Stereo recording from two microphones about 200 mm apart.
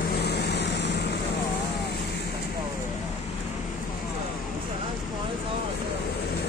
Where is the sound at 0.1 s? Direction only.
55° left (ahead or behind).